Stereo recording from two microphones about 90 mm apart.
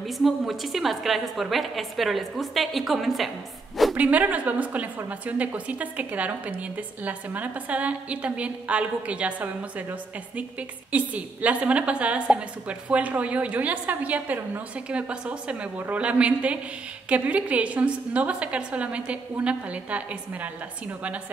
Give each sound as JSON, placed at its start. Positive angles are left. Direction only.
{"t": 0.2, "sound": "a woman's voice", "side_deg": 0}
{"t": 3.9, "sound": "a woman's voice", "side_deg": -15}